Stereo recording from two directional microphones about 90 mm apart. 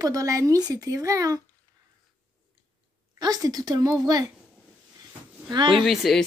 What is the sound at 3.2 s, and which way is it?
Speech, 45° right (ahead or behind).